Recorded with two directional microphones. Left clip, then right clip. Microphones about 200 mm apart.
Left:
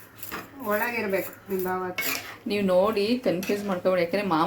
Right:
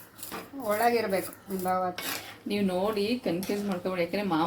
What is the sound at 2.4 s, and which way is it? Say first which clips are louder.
Speech: left 7 dB; 20° left (ahead or behind).